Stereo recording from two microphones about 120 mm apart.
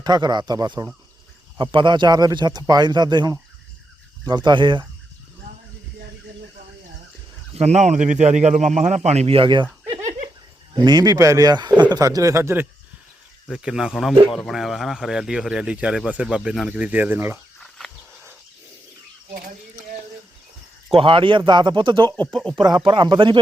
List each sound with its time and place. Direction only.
0.0 s speech: 35° right (ahead or behind)
1.5 s speech: 40° right (ahead or behind)
7.5 s speech: 65° right (ahead or behind)
9.0 s speech: 60° right (ahead or behind); by 9.6 s 45° right (ahead or behind)
9.9 s a sound: 70° right (ahead or behind)
10.8 s a man's voice: 35° right (ahead or behind)
13.5 s speech: 5° right (ahead or behind)
17.6 s a sound: centre (ahead or behind)
20.9 s speech: 45° right (ahead or behind)
22.1 s speech: 5° left (ahead or behind)
22.9 s speech: 40° right (ahead or behind)